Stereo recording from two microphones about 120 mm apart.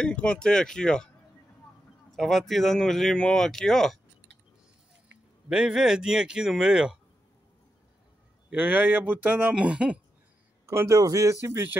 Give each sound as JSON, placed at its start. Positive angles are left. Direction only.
{"t": 0.0, "sound": "speech", "side_deg": 10}
{"t": 5.5, "sound": "speech", "side_deg": -5}
{"t": 8.5, "sound": "speech", "side_deg": -10}
{"t": 10.7, "sound": "speech", "side_deg": -25}